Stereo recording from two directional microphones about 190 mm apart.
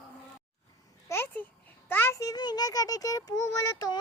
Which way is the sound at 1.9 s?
10° left (ahead or behind).